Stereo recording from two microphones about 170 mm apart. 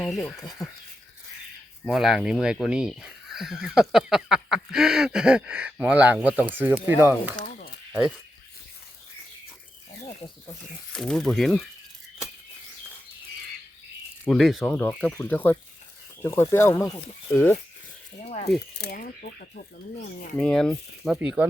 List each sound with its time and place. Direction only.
0.0 s speech: 10° left (ahead or behind)
1.8 s speech: centre (ahead or behind)
7.4 s a sound: 50° left (ahead or behind)
10.1 s speech: 30° left (ahead or behind)
10.9 s speech: 5° left (ahead or behind)
14.3 s speech: centre (ahead or behind)
18.2 s speech: 40° left (ahead or behind)
18.8 s speech: 60° left (ahead or behind)
20.4 s speech: 5° left (ahead or behind)
21.2 s speech: 10° right (ahead or behind)